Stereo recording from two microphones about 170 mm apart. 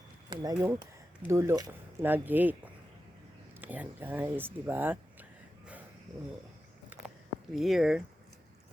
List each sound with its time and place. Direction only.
0.3 s speech: 20° right (ahead or behind)
3.6 s speech: 10° right (ahead or behind)
6.9 s a sound: 10° right (ahead or behind)
7.5 s speech: centre (ahead or behind)